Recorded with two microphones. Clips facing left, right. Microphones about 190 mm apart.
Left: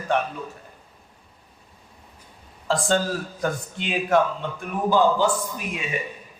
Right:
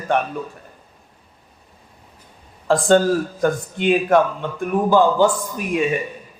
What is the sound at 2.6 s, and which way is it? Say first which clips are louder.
A man's voice: right 8 dB; 55° right (ahead or behind).